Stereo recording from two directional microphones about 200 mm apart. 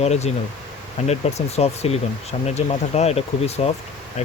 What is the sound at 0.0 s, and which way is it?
Speech, 30° left (ahead or behind).